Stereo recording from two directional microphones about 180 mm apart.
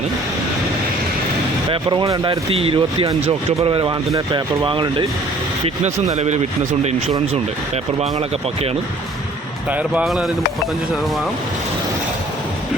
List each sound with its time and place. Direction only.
1.7 s speech: 25° right (ahead or behind)
9.7 s speech: 5° right (ahead or behind)